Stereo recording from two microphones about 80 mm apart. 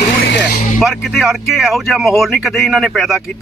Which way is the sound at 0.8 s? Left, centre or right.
Centre.